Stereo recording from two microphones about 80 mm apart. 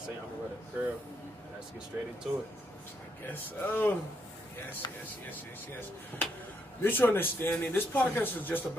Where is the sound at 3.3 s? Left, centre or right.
Left.